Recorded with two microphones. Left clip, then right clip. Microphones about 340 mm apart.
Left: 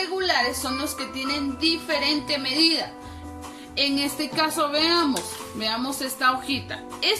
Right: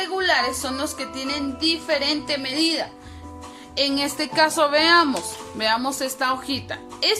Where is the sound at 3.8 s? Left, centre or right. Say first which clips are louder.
Right 2 dB; centre.